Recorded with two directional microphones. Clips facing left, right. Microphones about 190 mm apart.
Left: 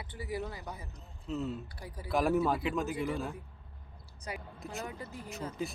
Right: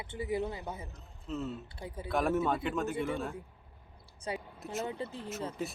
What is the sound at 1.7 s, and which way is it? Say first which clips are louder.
Speech: right 4 dB; 25° right (ahead or behind).